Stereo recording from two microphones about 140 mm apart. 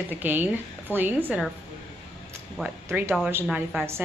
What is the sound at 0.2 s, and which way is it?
Speech, 15° right (ahead or behind).